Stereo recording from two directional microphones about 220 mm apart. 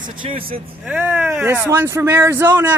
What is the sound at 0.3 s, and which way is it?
Speech, 25° right (ahead or behind).